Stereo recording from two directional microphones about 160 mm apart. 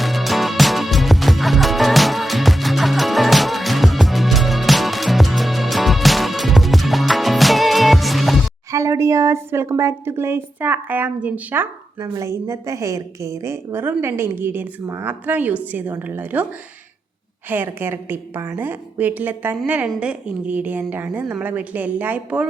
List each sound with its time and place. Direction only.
0.0 s music: centre (ahead or behind)
8.7 s a woman's voice: 20° right (ahead or behind)
17.5 s a woman's voice: 15° right (ahead or behind)